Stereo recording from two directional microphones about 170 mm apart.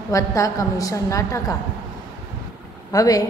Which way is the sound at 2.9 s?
20° left (ahead or behind).